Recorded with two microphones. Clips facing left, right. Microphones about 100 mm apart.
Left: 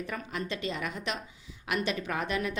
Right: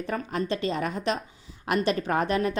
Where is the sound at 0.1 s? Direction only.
40° right (ahead or behind).